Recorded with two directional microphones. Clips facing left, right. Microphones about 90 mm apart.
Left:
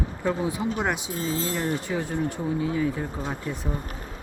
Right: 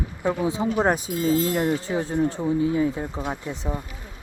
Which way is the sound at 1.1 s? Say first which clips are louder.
Right 4 dB; 35° left (ahead or behind).